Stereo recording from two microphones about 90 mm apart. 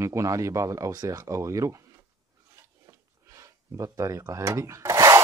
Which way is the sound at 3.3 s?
35° right (ahead or behind).